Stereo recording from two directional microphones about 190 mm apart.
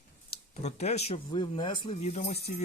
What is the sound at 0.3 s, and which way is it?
Speech, 35° left (ahead or behind).